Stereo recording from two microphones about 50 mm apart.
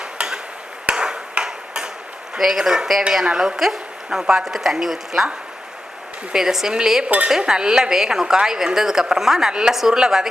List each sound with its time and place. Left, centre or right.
0.0 s tick-tock: centre
0.9 s a sound: centre
2.4 s a woman's voice: centre
6.3 s a woman's voice: centre
7.0 s speech: right
7.3 s a woman's voice: centre